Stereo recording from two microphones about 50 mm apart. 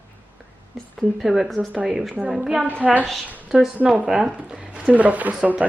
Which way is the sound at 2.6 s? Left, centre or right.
Right.